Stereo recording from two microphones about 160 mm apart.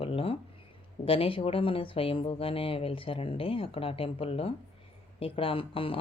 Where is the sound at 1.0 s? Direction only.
35° left (ahead or behind).